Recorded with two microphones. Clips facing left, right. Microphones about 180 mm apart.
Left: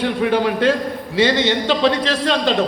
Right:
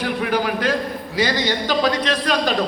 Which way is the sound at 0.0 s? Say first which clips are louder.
Left 4 dB; 25° left (ahead or behind).